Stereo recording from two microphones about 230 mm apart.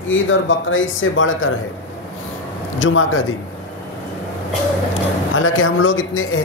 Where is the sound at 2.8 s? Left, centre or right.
Left.